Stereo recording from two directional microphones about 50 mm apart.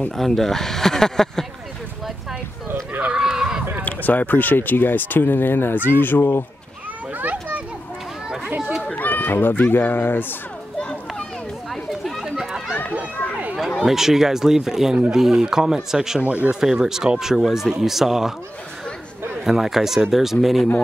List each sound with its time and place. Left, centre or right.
0.2 s speech: centre
3.2 s a sound: centre
3.8 s speech: left
7.2 s children playing: right
8.9 s speech: left
10.8 s children playing: left
11.7 s chatter: centre
12.4 s run: centre
13.7 s speech: centre
16.2 s speech: right
16.7 s speech: centre
19.4 s speech: centre